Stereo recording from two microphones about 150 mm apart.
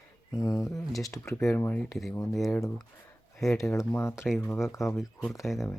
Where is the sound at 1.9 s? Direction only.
Centre (ahead or behind).